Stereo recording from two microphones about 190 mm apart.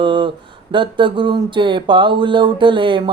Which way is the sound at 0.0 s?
25° right (ahead or behind).